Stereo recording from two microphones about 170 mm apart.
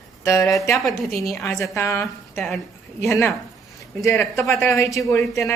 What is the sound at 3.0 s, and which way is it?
Speech, 15° left (ahead or behind).